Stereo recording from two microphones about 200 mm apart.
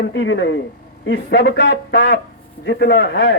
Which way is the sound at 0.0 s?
65° left (ahead or behind).